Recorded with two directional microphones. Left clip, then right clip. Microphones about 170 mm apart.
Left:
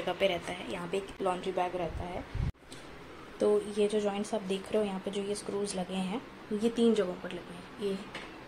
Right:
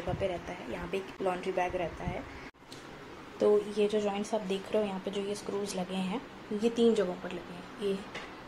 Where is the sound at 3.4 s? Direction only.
5° left (ahead or behind).